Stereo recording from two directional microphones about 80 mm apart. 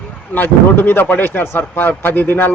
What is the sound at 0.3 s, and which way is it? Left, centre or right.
A man's voice, left.